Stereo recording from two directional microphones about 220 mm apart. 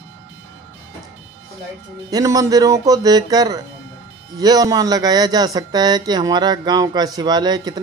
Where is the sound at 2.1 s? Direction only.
15° right (ahead or behind).